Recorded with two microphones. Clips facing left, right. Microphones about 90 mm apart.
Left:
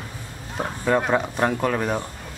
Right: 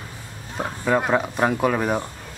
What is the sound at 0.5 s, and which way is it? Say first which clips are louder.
Speech: even; centre (ahead or behind).